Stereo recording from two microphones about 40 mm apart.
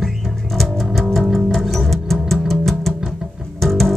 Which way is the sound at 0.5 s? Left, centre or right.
Centre.